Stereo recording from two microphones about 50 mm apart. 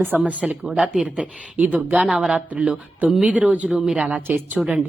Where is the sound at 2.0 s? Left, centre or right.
Centre.